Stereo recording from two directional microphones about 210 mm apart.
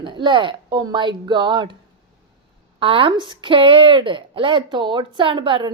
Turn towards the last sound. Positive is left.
turn(degrees=-25)  # may be behind; listen again after turning